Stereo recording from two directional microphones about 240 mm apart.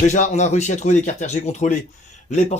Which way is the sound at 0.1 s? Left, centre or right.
Left.